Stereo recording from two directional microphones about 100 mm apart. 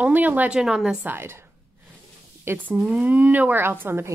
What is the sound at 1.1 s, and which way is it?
Speech, 25° right (ahead or behind).